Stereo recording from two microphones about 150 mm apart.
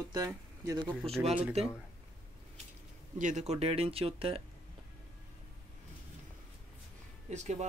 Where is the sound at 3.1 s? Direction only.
55° right (ahead or behind); by 4.4 s 40° right (ahead or behind).